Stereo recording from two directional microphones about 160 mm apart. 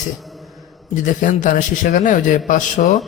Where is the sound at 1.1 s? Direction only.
55° left (ahead or behind).